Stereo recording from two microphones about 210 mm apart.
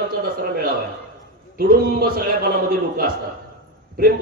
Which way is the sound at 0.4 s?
45° right (ahead or behind).